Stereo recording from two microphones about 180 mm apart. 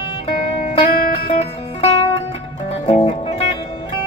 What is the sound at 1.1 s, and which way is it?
Music, 35° left (ahead or behind).